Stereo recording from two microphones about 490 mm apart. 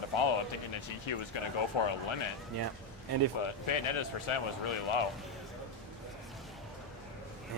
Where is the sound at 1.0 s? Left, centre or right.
Left.